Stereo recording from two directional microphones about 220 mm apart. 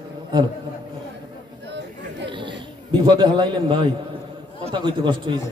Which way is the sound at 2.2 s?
20° right (ahead or behind).